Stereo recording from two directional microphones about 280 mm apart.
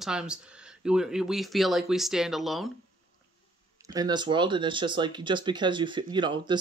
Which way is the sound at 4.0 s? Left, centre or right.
Centre.